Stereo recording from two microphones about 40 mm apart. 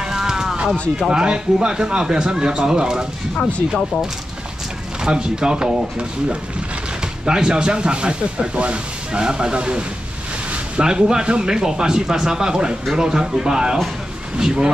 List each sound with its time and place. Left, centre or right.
0.0 s a sound: centre
1.1 s speech: right
5.0 s speech: right